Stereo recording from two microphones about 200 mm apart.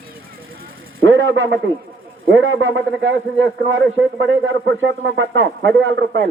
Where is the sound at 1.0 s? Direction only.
85° right.